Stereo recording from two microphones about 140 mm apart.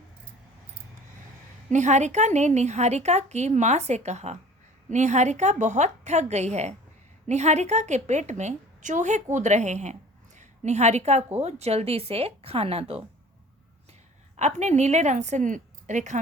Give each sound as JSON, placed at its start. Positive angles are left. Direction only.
{"t": 1.7, "sound": "a woman's voice", "side_deg": -55}
{"t": 14.3, "sound": "a woman's voice", "side_deg": -55}